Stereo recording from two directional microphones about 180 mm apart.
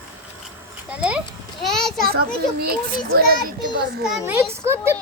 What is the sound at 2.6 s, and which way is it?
A child's voice, 60° right (ahead or behind).